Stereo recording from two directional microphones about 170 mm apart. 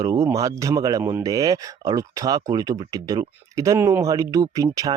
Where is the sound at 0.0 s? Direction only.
20° right (ahead or behind).